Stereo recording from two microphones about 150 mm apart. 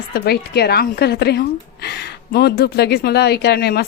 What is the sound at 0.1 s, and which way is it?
Speech, 90° left.